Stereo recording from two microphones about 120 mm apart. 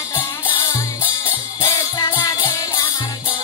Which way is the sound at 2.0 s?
40° left (ahead or behind).